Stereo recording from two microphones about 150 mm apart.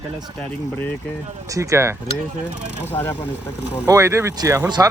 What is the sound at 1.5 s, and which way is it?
Speech, 20° right (ahead or behind).